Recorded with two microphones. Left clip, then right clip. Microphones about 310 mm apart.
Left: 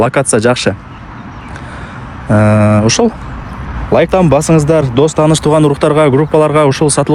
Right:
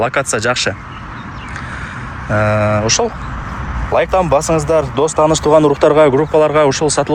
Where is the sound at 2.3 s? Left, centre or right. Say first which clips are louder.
Left 3 dB; centre.